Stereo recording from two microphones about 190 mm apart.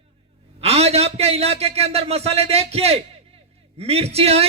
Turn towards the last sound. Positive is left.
turn(degrees=-30)  # may be behind; listen again after turning